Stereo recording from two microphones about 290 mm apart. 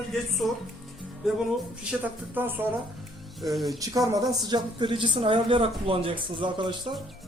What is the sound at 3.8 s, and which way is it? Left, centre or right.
A woman's voice, centre.